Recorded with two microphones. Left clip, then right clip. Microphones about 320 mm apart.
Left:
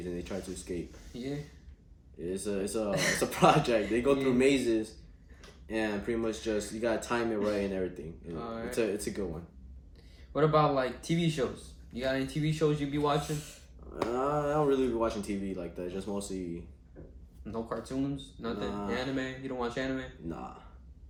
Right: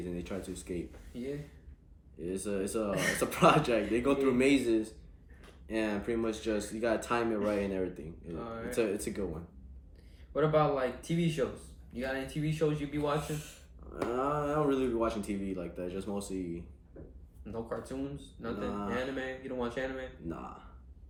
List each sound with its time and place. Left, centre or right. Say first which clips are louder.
0.0 s speech: left 2 dB; centre
1.1 s speech: left 1 dB; left
2.1 s speech: left 1 dB; centre
8.3 s speech: left 2 dB; left
8.7 s speech: even; centre
10.3 s speech: left 2 dB; left
13.3 s speech: left 2 dB; centre
17.4 s speech: left 2 dB; left
18.7 s speech: left 1 dB; centre
18.9 s speech: left 1 dB; left
20.2 s speech: left 1 dB; centre